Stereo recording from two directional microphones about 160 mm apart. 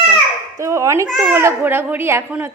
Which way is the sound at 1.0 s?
5° right (ahead or behind).